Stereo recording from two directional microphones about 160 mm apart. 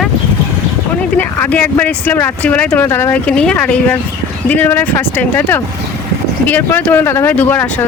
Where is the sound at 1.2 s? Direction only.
10° left (ahead or behind).